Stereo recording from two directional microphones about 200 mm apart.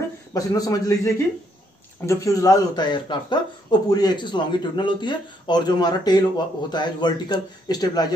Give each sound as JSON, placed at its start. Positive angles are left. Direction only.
{"t": 0.3, "sound": "a man's voice", "side_deg": 20}